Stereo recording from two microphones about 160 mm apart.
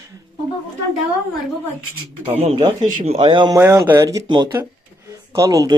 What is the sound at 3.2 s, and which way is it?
Speech, 25° right (ahead or behind).